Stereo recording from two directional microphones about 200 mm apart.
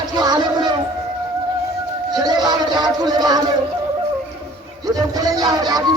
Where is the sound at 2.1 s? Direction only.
20° right (ahead or behind).